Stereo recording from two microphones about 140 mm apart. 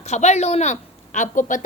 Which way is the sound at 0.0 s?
55° left (ahead or behind).